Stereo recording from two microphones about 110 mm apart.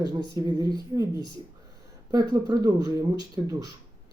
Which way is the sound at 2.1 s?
40° right (ahead or behind).